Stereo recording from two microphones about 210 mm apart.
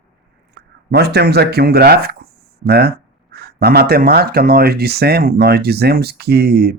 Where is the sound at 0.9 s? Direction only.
50° right (ahead or behind).